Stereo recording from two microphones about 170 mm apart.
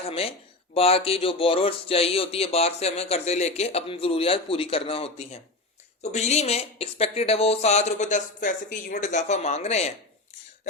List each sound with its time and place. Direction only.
0.1 s speech: 35° left (ahead or behind)